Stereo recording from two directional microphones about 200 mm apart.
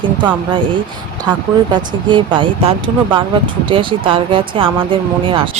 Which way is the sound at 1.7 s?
25° right (ahead or behind).